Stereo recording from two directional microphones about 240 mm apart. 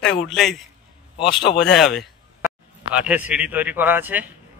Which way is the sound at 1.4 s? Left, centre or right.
Left.